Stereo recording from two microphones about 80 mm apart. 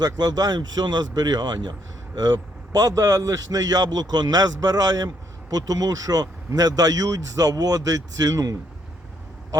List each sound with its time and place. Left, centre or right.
0.0 s a man's voice: right